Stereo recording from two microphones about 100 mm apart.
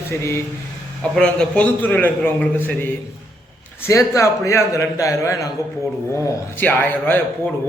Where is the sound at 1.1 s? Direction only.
10° left (ahead or behind).